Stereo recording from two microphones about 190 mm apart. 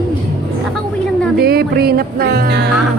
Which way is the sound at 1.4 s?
55° right (ahead or behind).